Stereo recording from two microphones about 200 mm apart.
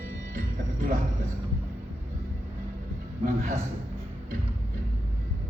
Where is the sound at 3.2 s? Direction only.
40° right (ahead or behind).